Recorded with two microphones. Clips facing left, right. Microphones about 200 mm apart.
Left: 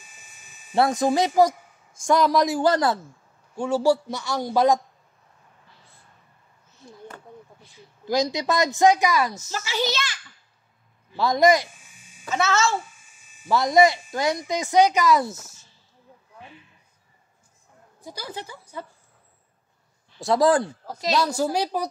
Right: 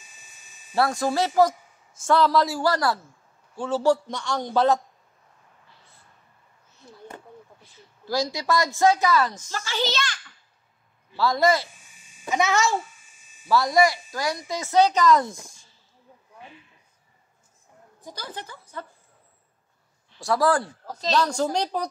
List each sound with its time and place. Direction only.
0.7 s a woman's voice: 20° left (ahead or behind)
8.0 s a woman's voice: 20° left (ahead or behind)
11.1 s a woman's voice: 20° left (ahead or behind)
12.3 s a child's voice: 15° right (ahead or behind)
13.5 s a woman's voice: 20° left (ahead or behind)
18.0 s a woman's voice: 10° left (ahead or behind)
20.2 s a woman's voice: 20° left (ahead or behind)